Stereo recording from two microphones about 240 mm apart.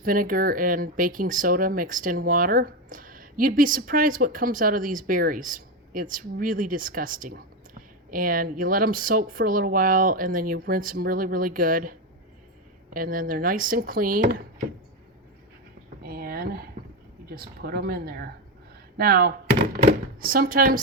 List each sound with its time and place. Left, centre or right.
0.0 s speech: right
16.0 s a sound: right
17.2 s speech: right